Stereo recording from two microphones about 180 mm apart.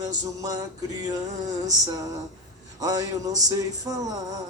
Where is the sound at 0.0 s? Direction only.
20° right (ahead or behind).